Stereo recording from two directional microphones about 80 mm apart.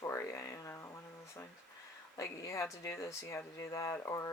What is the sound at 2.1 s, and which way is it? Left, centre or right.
Speech, left.